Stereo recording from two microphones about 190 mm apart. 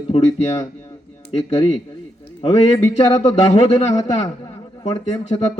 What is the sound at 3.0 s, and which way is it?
Speech, 20° left (ahead or behind).